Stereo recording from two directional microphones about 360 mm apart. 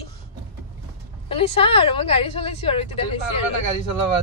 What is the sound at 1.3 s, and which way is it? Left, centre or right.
Speech, centre.